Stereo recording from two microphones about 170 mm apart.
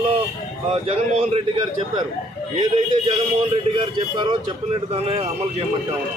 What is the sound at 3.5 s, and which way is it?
Speech, 30° right (ahead or behind).